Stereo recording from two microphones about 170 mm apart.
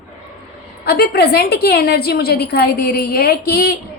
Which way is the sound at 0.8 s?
65° left (ahead or behind).